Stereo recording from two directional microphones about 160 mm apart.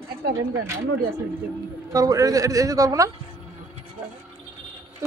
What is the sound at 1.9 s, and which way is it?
Speech, 20° right (ahead or behind).